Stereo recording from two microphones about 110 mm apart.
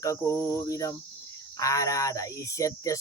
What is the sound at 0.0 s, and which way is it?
Speech, 30° left (ahead or behind).